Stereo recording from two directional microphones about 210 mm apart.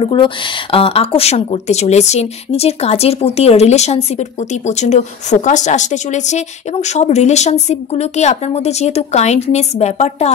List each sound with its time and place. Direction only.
0.0 s speech: 25° left (ahead or behind)